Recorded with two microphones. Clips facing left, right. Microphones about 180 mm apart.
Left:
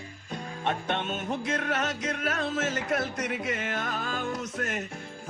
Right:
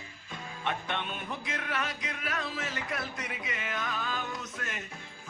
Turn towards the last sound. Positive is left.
turn(degrees=45)  # may be behind; listen again after turning